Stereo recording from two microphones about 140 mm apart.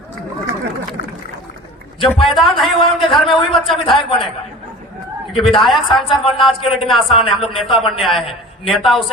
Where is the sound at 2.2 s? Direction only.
Centre (ahead or behind).